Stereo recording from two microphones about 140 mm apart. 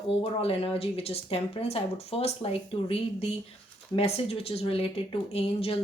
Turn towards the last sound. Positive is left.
turn(degrees=45)  # may be behind; listen again after turning